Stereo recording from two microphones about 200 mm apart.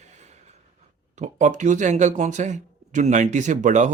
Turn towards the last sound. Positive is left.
turn(degrees=-40)  # may be behind; listen again after turning